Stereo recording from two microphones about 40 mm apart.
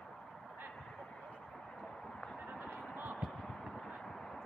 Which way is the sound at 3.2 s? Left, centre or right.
Centre.